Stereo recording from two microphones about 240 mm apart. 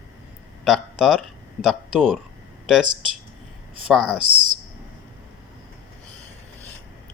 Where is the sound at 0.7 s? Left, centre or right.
Centre.